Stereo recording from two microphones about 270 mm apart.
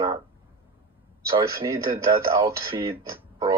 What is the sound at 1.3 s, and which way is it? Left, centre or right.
Speech, centre.